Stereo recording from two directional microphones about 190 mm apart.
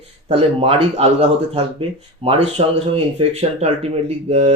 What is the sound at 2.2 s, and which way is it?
Speech, 30° right (ahead or behind).